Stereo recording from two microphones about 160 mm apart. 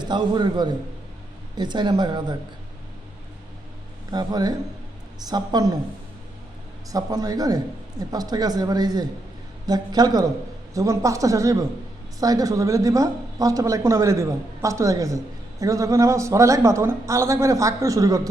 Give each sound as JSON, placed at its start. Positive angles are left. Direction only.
{"t": 0.0, "sound": "speech", "side_deg": -25}
{"t": 4.1, "sound": "speech", "side_deg": -25}
{"t": 6.9, "sound": "speech", "side_deg": -25}